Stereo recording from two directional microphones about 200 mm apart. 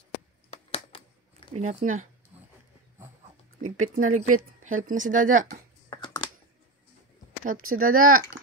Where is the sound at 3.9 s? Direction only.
40° right (ahead or behind).